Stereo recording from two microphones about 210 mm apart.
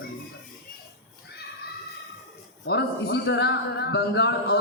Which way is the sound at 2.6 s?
55° left (ahead or behind).